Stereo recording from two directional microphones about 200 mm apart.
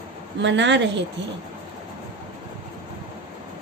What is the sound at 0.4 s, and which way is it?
Speech, 65° right (ahead or behind).